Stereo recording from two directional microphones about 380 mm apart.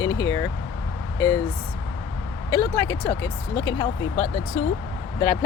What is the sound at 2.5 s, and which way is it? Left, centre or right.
Speech, centre.